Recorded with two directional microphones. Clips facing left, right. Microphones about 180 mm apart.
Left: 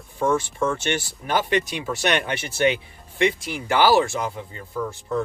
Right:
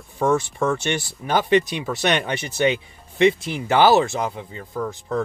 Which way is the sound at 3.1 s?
25° right (ahead or behind).